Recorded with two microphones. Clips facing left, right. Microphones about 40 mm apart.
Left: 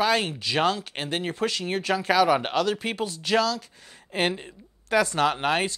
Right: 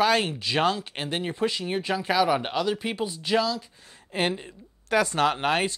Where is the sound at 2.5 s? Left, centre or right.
Left.